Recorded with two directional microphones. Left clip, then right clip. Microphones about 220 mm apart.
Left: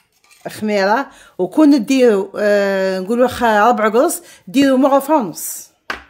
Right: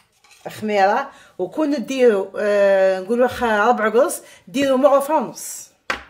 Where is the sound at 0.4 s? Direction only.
55° left (ahead or behind).